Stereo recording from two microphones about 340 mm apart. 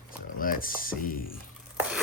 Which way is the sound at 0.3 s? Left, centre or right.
Left.